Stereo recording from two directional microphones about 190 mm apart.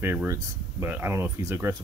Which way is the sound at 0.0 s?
10° right (ahead or behind).